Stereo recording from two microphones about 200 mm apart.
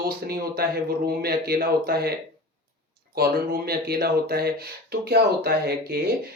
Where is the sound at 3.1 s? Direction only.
50° right (ahead or behind).